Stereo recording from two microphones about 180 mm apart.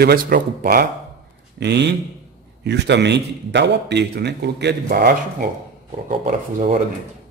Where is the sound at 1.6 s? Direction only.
70° right (ahead or behind); by 6.8 s 50° right (ahead or behind).